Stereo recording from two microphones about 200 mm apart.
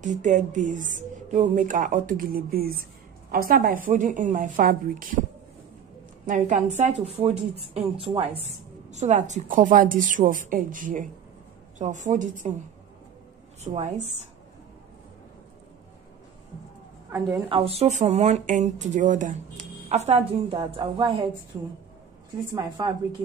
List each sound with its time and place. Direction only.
0.0 s speech: 40° right (ahead or behind)
6.2 s a woman's voice: 40° right (ahead or behind)
13.7 s speech: 35° right (ahead or behind)
17.5 s a woman's voice: 30° right (ahead or behind)